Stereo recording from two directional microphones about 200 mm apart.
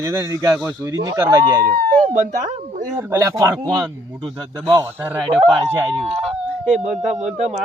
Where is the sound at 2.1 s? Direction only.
35° right (ahead or behind).